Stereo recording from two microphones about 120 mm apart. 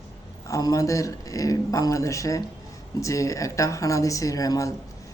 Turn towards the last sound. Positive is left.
turn(degrees=30)  # may be behind; listen again after turning